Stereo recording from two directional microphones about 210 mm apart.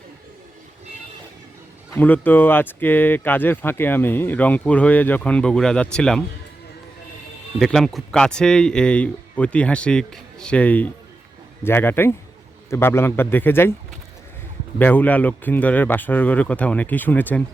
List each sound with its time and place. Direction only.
1.9 s speech: 10° left (ahead or behind)
7.6 s speech: centre (ahead or behind)
14.8 s speech: 10° left (ahead or behind)